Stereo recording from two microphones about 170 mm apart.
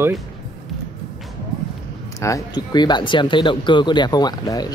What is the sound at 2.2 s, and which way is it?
Speech, 20° left (ahead or behind).